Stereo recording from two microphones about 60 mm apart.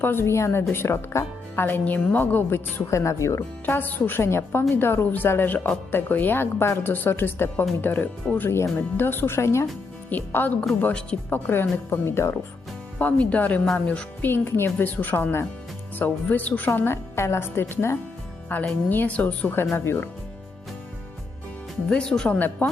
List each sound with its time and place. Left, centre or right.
0.0 s a woman's voice: left
1.8 s speech: left
3.7 s a woman's voice: left
8.4 s speech: left
10.1 s a woman's voice: left
13.0 s a woman's voice: left
14.2 s a woman's voice: left
18.5 s a woman's voice: left
19.7 s a woman's voice: left
21.8 s speech: centre
22.3 s a woman's voice: left